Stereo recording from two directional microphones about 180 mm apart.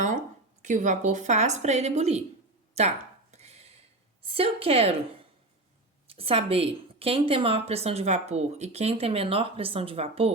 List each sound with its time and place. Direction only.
0.6 s a woman's voice: 45° right (ahead or behind)
3.3 s a sound: 35° right (ahead or behind)
4.3 s a woman's voice: 30° right (ahead or behind)
6.1 s a woman's voice: 30° right (ahead or behind)